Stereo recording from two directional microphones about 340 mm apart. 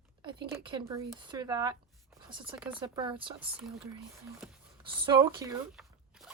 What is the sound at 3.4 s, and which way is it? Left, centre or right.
Speech, centre.